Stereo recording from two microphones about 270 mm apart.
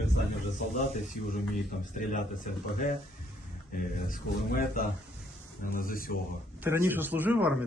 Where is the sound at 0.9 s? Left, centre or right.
Left.